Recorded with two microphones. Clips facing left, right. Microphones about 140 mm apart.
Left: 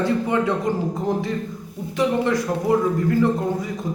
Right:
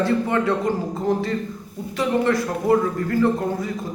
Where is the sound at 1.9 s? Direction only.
15° left (ahead or behind).